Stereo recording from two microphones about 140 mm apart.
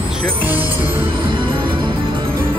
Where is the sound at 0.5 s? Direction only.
15° right (ahead or behind).